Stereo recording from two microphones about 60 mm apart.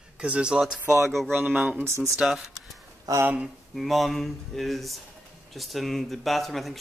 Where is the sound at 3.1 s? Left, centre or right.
Right.